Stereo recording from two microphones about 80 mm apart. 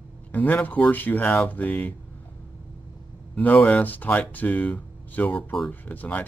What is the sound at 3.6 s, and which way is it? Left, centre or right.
Speech, centre.